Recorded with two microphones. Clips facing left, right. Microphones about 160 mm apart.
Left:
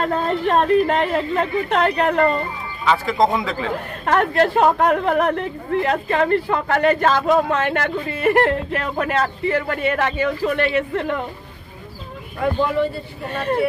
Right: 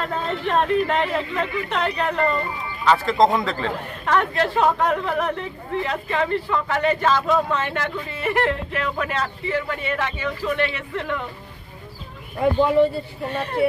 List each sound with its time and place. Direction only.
0.0 s speech: 40° left (ahead or behind)
2.8 s a man's voice: 5° left (ahead or behind)
4.0 s speech: 50° left (ahead or behind)